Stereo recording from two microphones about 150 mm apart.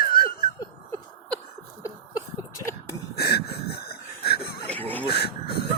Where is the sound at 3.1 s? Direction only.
90° left.